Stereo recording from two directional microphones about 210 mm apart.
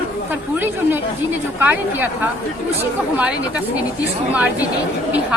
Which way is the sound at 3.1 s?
5° right (ahead or behind).